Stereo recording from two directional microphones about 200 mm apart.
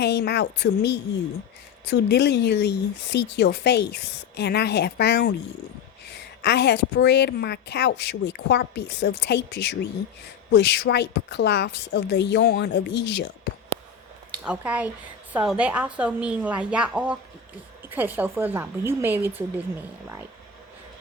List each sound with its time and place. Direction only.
0.0 s a woman's voice: 55° left (ahead or behind)
14.4 s a woman's voice: 5° right (ahead or behind)